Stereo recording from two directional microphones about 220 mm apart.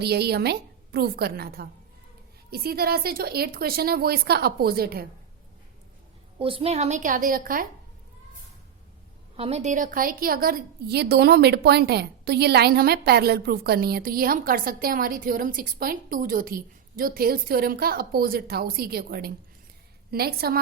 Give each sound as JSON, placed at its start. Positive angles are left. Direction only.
{"t": 0.0, "sound": "a woman's voice", "side_deg": -45}
{"t": 6.4, "sound": "a woman's voice", "side_deg": -25}
{"t": 9.3, "sound": "a woman's voice", "side_deg": -30}